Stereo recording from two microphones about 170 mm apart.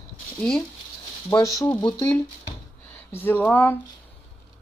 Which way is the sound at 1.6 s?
10° left (ahead or behind).